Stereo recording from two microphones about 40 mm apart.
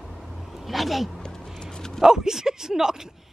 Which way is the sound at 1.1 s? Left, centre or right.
Centre.